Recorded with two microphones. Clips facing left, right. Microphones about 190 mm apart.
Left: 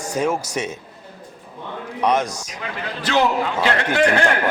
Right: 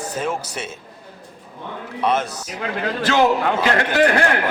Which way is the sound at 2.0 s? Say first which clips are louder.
Left 1 dB; 15° left (ahead or behind).